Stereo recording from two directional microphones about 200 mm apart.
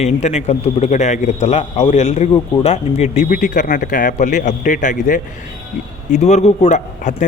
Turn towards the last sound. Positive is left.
turn(degrees=35)  # may be behind; listen again after turning